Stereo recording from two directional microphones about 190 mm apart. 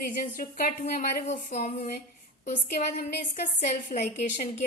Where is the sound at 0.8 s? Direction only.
40° left (ahead or behind).